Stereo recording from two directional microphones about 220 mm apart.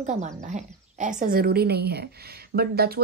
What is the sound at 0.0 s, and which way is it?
A woman's voice, 35° right (ahead or behind).